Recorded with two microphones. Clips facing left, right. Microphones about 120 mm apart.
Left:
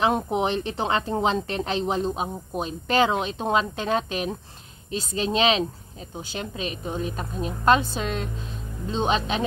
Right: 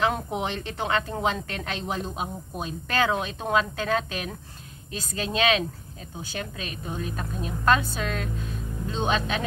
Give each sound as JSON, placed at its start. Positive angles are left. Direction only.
{"t": 0.0, "sound": "speech", "side_deg": 25}